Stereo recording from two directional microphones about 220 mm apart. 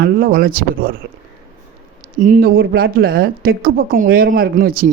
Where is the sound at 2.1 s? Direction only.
40° right (ahead or behind).